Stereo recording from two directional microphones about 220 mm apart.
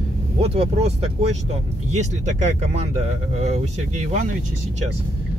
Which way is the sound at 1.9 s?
30° right (ahead or behind).